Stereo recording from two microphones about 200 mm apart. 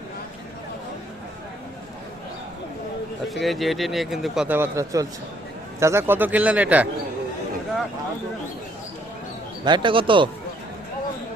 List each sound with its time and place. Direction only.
3.4 s a man's voice: centre (ahead or behind)
9.6 s speech: 25° right (ahead or behind)